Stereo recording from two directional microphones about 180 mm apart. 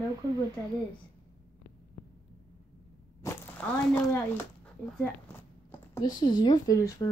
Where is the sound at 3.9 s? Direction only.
15° left (ahead or behind).